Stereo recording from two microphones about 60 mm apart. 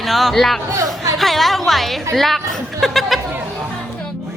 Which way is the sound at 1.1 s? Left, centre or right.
Centre.